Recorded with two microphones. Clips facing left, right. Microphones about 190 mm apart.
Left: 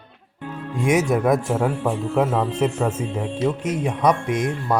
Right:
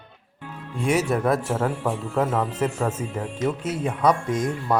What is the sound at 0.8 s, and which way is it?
Speech, 15° left (ahead or behind).